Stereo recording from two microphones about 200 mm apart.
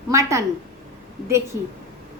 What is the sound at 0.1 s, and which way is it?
Speech, 15° right (ahead or behind).